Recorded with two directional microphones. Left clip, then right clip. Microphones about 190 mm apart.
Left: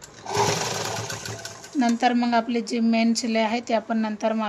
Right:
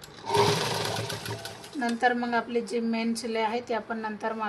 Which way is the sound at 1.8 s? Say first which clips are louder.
Left 4 dB; 60° left (ahead or behind).